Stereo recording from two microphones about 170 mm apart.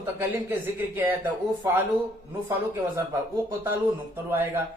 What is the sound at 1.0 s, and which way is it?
Speech, 10° right (ahead or behind).